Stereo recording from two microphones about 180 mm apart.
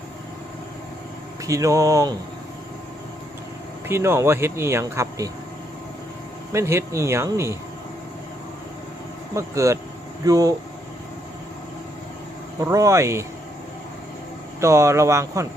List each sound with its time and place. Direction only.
1.5 s speech: 15° right (ahead or behind)
3.8 s speech: 15° right (ahead or behind)
6.5 s speech: 15° right (ahead or behind)
9.3 s speech: 15° right (ahead or behind)
12.6 s speech: 15° right (ahead or behind)
14.6 s speech: 15° right (ahead or behind)